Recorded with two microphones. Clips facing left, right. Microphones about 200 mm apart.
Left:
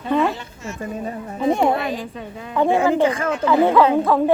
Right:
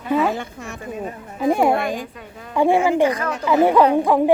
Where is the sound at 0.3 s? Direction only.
55° right (ahead or behind).